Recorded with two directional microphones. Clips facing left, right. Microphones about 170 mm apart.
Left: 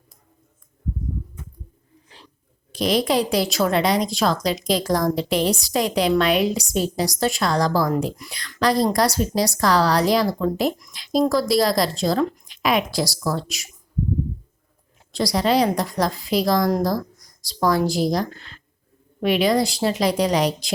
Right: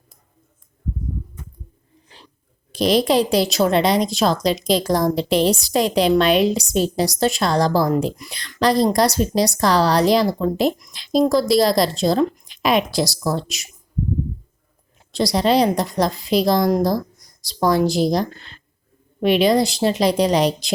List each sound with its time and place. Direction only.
2.7 s a woman's voice: 30° right (ahead or behind)
15.1 s a woman's voice: 25° right (ahead or behind)